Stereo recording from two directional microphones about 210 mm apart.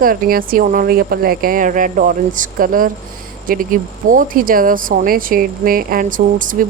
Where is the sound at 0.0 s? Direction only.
40° right (ahead or behind).